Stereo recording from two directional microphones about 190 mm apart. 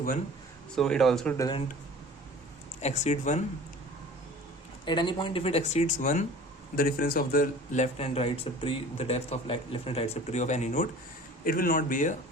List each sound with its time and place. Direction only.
0.8 s speech: centre (ahead or behind)
1.4 s speech: 20° left (ahead or behind)
2.8 s a man's voice: 35° left (ahead or behind)
4.9 s a man's voice: 25° left (ahead or behind)
11.4 s a man's voice: 50° left (ahead or behind)